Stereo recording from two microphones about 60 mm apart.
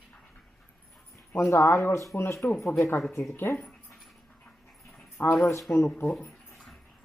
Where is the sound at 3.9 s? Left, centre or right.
Centre.